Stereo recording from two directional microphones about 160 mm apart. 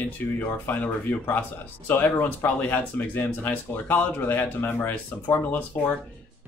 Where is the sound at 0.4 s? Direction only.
10° left (ahead or behind).